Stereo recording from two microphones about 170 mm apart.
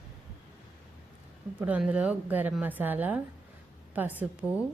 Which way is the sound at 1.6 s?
10° right (ahead or behind).